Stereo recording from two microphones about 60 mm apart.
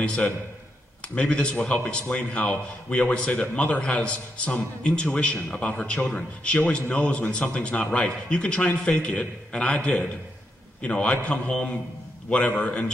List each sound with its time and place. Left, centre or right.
1.1 s a man's voice: centre